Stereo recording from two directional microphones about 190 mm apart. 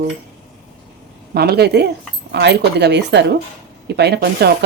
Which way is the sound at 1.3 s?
55° right (ahead or behind).